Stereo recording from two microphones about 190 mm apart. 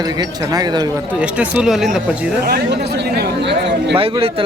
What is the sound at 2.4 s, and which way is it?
Speech, 55° right (ahead or behind).